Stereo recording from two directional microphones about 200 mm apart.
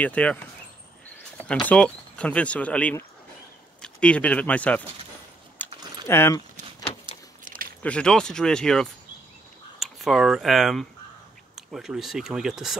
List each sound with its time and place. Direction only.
0.0 s speech: 5° left (ahead or behind)
1.5 s speech: 5° left (ahead or behind)
5.6 s typing: 10° left (ahead or behind)
6.0 s speech: 10° left (ahead or behind)
7.4 s a sound: 45° right (ahead or behind)
7.8 s speech: 5° left (ahead or behind)